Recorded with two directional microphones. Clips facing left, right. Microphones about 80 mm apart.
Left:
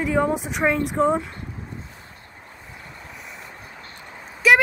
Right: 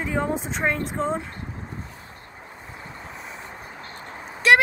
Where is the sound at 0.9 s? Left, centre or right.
Centre.